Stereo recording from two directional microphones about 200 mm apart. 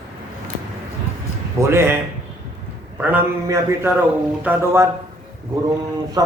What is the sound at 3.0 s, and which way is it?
A man's voice, 10° right (ahead or behind).